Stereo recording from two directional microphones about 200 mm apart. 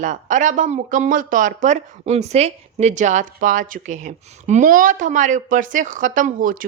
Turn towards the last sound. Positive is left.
turn(degrees=-45)  # may be behind; listen again after turning